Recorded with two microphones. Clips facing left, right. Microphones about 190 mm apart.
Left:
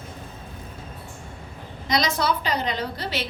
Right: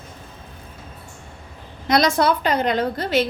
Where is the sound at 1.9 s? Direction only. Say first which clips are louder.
Right 6 dB; 50° right (ahead or behind).